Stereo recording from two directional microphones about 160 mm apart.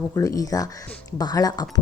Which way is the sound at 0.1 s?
20° left (ahead or behind).